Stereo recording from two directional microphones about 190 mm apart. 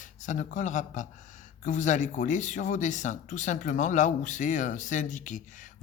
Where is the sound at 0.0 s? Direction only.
40° left (ahead or behind).